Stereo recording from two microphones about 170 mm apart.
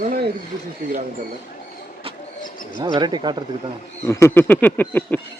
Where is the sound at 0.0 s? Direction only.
55° right (ahead or behind).